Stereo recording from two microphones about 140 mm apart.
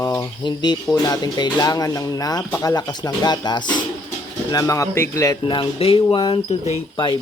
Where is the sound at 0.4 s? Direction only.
30° left (ahead or behind).